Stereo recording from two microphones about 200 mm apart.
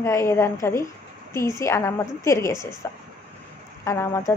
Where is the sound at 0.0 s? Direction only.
15° left (ahead or behind).